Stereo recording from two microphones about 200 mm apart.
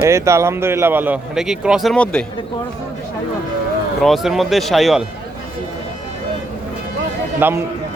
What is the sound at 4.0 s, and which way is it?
Speech, centre (ahead or behind).